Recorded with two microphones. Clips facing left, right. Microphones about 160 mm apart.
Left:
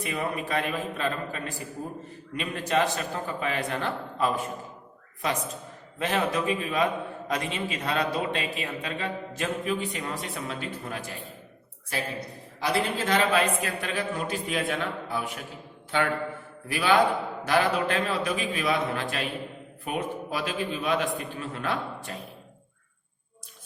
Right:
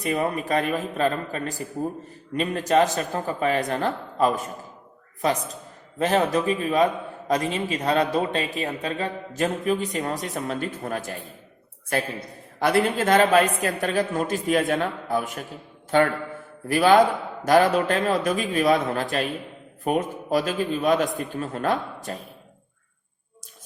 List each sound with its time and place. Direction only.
0.0 s a man's voice: 40° right (ahead or behind)
6.0 s a man's voice: 40° right (ahead or behind)
12.5 s a woman's voice: 55° right (ahead or behind)